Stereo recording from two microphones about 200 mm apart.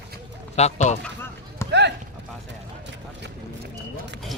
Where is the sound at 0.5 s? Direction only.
35° left (ahead or behind).